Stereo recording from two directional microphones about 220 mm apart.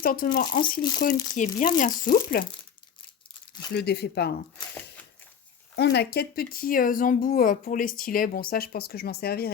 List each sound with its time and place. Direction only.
0.0 s speech: 40° left (ahead or behind)
0.5 s speech: 20° left (ahead or behind)
1.4 s speech: 35° left (ahead or behind)
3.7 s speech: 50° left (ahead or behind)
5.7 s speech: 50° left (ahead or behind)